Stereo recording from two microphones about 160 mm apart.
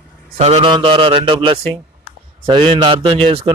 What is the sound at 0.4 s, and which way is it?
A man's voice, 40° right (ahead or behind).